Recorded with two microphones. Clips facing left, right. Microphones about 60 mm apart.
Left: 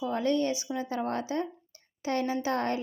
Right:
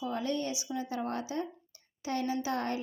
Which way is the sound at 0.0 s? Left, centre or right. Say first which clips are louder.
Left 6 dB; left.